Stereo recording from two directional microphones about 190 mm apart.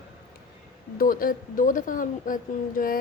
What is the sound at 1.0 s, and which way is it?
A woman's voice, 45° left (ahead or behind).